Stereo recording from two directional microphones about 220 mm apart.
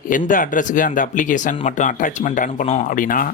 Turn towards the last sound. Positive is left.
turn(degrees=40)  # may be behind; listen again after turning